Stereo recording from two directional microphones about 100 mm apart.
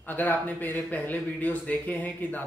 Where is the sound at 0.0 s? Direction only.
20° left (ahead or behind).